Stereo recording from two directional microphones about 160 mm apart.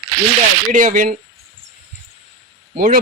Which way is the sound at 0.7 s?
55° right (ahead or behind).